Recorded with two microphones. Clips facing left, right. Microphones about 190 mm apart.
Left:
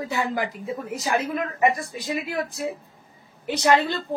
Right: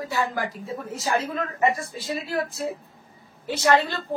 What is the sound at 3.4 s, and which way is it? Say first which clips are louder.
Speech: left 1 dB; 15° left (ahead or behind).